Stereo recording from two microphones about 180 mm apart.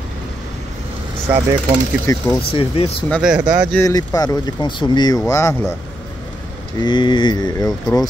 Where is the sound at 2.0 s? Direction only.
20° left (ahead or behind).